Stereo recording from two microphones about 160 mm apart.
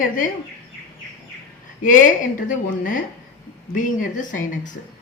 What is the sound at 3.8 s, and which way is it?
A woman's voice, 55° left (ahead or behind).